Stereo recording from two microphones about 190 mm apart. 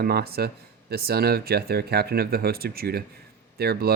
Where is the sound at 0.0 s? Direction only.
55° right (ahead or behind).